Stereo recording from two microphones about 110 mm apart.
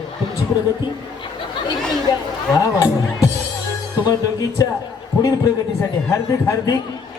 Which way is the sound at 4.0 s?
35° left (ahead or behind).